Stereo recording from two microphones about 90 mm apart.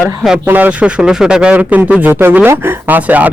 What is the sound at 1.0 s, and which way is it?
Speech, 5° right (ahead or behind).